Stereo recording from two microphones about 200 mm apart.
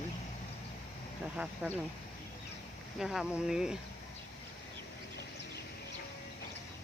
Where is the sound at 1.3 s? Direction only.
5° right (ahead or behind).